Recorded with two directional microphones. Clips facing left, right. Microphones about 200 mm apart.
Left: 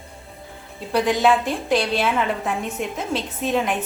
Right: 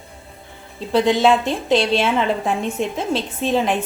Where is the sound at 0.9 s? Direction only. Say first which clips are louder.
Right 3 dB; 25° right (ahead or behind).